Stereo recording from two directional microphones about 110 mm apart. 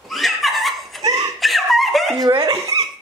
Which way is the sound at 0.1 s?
Centre (ahead or behind).